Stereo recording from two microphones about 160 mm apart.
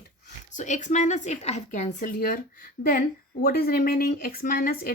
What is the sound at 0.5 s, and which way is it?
A woman's voice, 50° left (ahead or behind).